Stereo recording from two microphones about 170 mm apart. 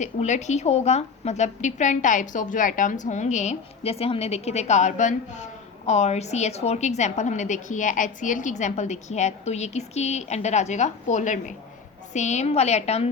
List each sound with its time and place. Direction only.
0.0 s a woman's voice: 45° left (ahead or behind)